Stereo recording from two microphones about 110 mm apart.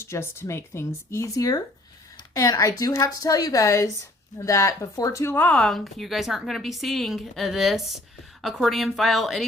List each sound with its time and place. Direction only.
0.0 s speech: 25° left (ahead or behind); by 9.4 s centre (ahead or behind)